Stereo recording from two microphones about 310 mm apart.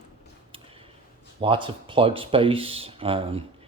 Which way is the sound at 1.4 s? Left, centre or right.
Centre.